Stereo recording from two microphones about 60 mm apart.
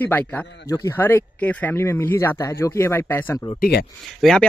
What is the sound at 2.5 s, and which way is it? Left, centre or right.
Speech, left.